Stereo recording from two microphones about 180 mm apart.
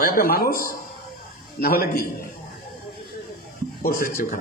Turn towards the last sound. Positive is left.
turn(degrees=50)  # may be behind; listen again after turning